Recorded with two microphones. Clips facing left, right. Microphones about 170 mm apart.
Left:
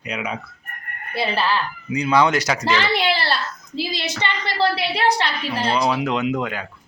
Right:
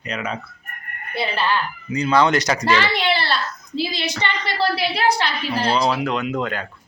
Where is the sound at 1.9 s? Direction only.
10° left (ahead or behind).